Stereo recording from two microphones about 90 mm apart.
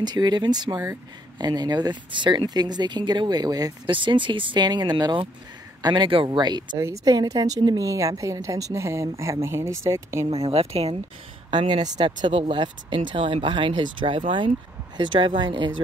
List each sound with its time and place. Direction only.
0.0 s speech: 50° right (ahead or behind)
3.8 s speech: 65° right (ahead or behind)
6.8 s a woman's voice: 35° right (ahead or behind)
7.2 s a woman's voice: 45° right (ahead or behind)
10.2 s speech: 90° right
11.5 s speech: 60° right (ahead or behind)
12.4 s speech: 70° right (ahead or behind)